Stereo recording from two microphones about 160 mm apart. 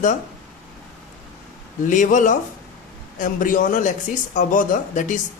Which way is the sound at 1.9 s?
50° left (ahead or behind).